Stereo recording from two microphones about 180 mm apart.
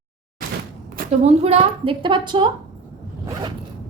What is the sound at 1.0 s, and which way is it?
Speech, 35° right (ahead or behind).